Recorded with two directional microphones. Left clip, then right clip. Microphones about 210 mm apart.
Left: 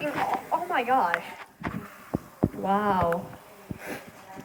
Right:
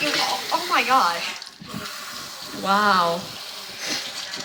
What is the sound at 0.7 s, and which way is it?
Music, 10° left (ahead or behind).